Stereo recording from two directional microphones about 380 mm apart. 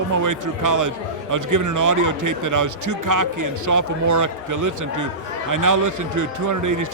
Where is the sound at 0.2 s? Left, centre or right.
Right.